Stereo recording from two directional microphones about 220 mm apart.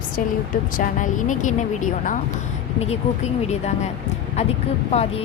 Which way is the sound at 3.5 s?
30° left (ahead or behind).